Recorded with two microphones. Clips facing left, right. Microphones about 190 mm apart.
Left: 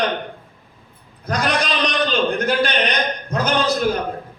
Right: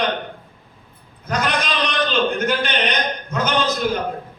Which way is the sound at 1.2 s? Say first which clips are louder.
Left 1 dB; 35° left (ahead or behind).